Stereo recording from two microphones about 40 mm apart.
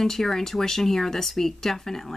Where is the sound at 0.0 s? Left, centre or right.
Centre.